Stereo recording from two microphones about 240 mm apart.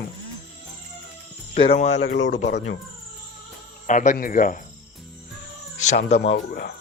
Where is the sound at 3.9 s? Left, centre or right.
Left.